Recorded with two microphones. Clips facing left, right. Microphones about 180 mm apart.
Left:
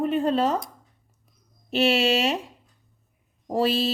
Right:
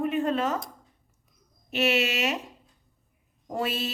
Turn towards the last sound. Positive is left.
turn(degrees=30)  # may be behind; listen again after turning